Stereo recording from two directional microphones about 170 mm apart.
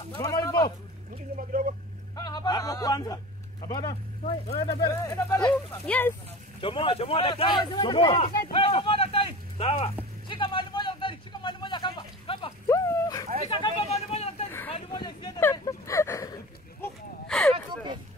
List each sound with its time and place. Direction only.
0.1 s speech: 20° left (ahead or behind)
1.1 s speech: 55° right (ahead or behind)
2.1 s speech: 25° left (ahead or behind)
6.6 s speech: 30° left (ahead or behind)
8.4 s a sound: 30° left (ahead or behind)
10.2 s vehicle: 30° left (ahead or behind)
12.6 s dog: 20° left (ahead or behind)
13.5 s a sound: 30° left (ahead or behind)
16.8 s a sound: 5° left (ahead or behind)